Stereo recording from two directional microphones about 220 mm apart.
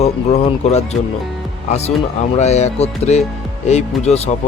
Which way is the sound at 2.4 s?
30° left (ahead or behind).